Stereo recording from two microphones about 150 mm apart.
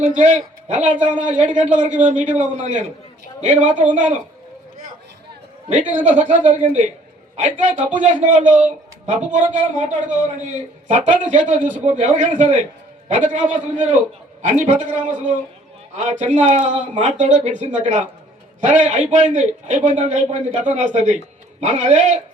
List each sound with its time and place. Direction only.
0.1 s a man's voice: 55° right (ahead or behind)
6.0 s a man's voice: 55° right (ahead or behind)
16.0 s a man's voice: 55° right (ahead or behind)